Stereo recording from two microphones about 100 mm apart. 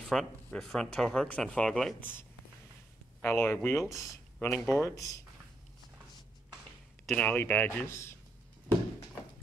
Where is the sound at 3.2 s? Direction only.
25° left (ahead or behind).